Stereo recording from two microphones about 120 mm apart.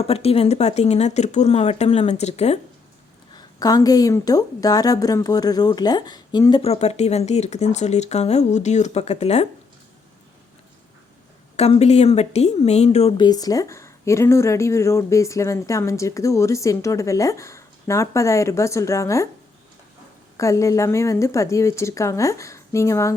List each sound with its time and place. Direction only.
0.0 s speech: 55° left (ahead or behind)
3.3 s a woman's voice: 30° left (ahead or behind)
6.6 s speech: 60° left (ahead or behind)
11.5 s speech: 60° left (ahead or behind)
13.1 s speech: 35° left (ahead or behind)
20.3 s speech: 25° left (ahead or behind)